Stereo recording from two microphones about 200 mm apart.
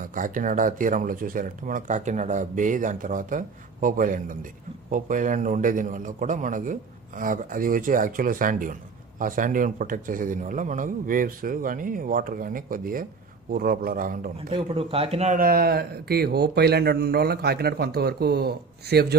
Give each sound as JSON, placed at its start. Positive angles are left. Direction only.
{"t": 0.0, "sound": "speech", "side_deg": -40}
{"t": 14.5, "sound": "speech", "side_deg": -30}